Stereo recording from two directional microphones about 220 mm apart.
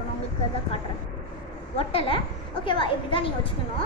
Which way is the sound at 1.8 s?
25° left (ahead or behind).